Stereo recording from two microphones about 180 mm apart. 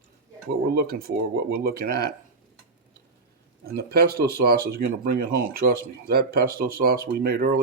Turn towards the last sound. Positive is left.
turn(degrees=-55)  # may be behind; listen again after turning